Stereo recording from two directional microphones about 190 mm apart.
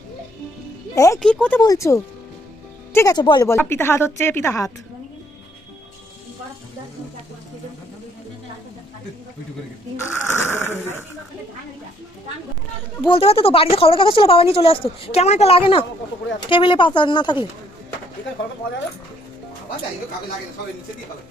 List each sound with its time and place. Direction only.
0.9 s a woman's voice: 15° left (ahead or behind)
1.2 s speech: 5° left (ahead or behind)
1.6 s a woman's voice: 15° left (ahead or behind)
10.0 s a woman's voice: 15° left (ahead or behind)
13.1 s speech: 30° left (ahead or behind)